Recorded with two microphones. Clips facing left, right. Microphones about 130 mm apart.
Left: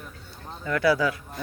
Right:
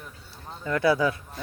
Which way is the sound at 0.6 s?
25° right (ahead or behind).